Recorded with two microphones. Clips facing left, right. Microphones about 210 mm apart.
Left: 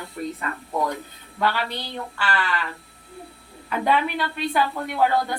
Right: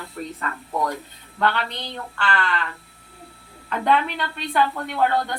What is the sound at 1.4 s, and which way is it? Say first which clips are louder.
A woman's voice: right 1 dB; 5° left (ahead or behind).